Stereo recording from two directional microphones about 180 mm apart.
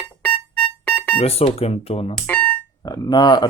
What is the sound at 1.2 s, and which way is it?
Speech, 35° left (ahead or behind).